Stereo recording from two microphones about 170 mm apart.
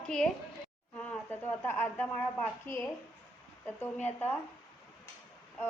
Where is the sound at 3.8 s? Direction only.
10° left (ahead or behind).